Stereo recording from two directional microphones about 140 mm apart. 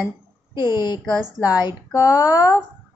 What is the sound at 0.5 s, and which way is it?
A woman's voice, 30° left (ahead or behind).